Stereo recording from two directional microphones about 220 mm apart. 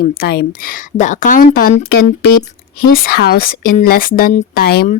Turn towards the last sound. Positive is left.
turn(degrees=45)  # may be behind; listen again after turning